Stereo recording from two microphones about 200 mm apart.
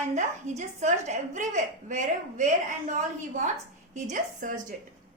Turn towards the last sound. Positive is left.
turn(degrees=-40)  # may be behind; listen again after turning